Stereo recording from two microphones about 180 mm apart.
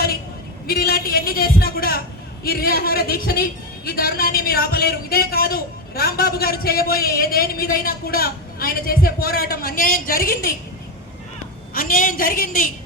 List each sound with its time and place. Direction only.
0.7 s a man's voice: 60° left (ahead or behind)
11.7 s a woman's voice: 55° left (ahead or behind)